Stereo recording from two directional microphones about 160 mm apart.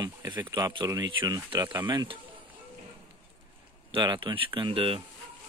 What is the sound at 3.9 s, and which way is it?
Speech, 30° right (ahead or behind).